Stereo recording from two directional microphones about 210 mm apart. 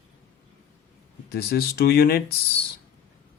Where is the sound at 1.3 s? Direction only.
45° left (ahead or behind).